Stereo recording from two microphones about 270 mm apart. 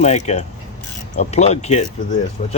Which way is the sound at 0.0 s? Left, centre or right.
Left.